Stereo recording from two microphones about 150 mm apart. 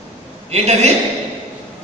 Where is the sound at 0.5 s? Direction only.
45° right (ahead or behind).